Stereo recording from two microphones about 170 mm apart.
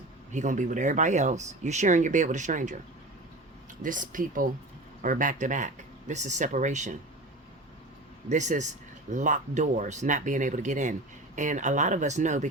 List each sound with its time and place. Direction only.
0.3 s speech: 45° right (ahead or behind)
3.8 s speech: 50° right (ahead or behind)
8.3 s speech: 45° right (ahead or behind)